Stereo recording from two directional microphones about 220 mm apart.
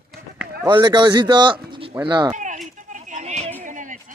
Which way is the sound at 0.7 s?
20° right (ahead or behind).